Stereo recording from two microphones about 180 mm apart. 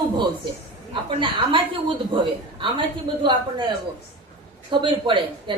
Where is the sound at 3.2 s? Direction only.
25° right (ahead or behind).